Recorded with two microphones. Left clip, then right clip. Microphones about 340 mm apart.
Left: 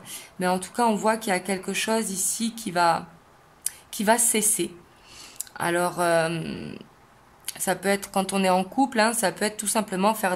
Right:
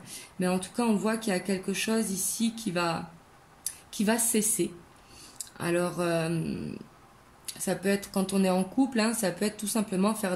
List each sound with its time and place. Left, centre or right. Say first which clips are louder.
0.0 s speech: left 5 dB; left